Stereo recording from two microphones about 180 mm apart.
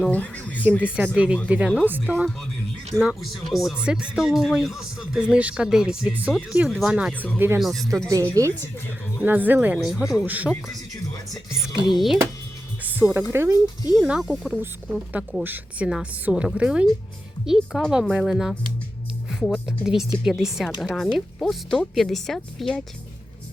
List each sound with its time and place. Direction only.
0.0 s speech: 10° left (ahead or behind)
0.9 s speech: 5° right (ahead or behind)
7.6 s speech: centre (ahead or behind)
8.1 s speech: 15° right (ahead or behind)
11.9 s speech: centre (ahead or behind)
12.8 s music: 10° right (ahead or behind)
13.3 s speech: 15° right (ahead or behind)
13.9 s speech: 5° right (ahead or behind)
19.3 s music: 5° right (ahead or behind)
19.8 s speech: centre (ahead or behind)